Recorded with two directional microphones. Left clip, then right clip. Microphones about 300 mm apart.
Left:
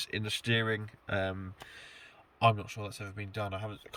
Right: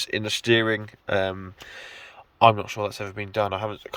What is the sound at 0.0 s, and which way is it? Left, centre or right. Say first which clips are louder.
Speech: right 9 dB; centre.